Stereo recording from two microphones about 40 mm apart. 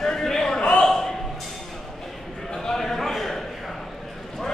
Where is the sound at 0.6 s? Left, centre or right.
Left.